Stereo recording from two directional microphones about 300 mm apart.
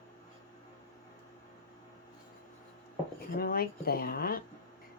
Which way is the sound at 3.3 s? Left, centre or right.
Left.